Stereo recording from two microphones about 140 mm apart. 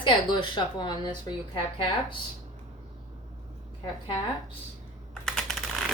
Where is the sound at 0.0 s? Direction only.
35° left (ahead or behind).